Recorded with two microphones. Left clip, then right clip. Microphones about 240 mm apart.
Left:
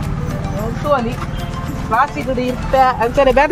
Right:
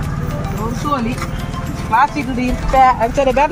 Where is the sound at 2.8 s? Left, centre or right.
Left.